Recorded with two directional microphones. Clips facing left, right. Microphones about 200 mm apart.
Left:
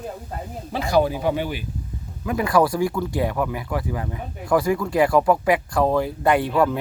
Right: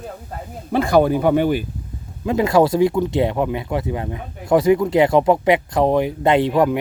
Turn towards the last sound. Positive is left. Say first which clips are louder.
# right 3 dB
turn(degrees=-15)  # may be behind; listen again after turning